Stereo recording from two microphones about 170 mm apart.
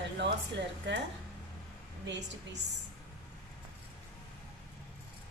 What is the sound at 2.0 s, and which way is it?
Speech, 90° right.